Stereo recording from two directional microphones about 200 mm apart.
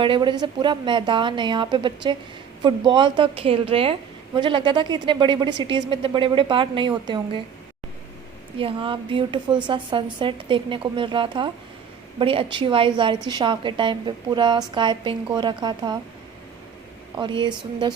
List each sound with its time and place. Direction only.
0.0 s speech: 25° right (ahead or behind)
8.5 s speech: 25° right (ahead or behind)
17.2 s speech: 25° right (ahead or behind)